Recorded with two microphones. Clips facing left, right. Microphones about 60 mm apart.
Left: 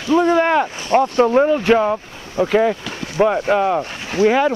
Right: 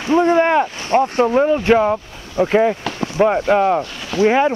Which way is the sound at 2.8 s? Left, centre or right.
Right.